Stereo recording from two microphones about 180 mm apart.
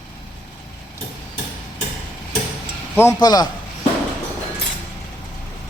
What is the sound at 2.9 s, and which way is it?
Speech, 15° left (ahead or behind).